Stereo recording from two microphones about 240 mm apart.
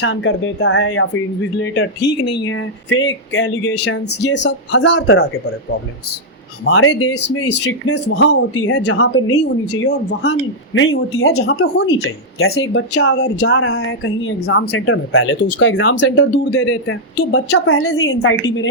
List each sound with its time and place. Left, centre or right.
0.0 s speech: left
6.7 s speech: left
15.6 s speech: left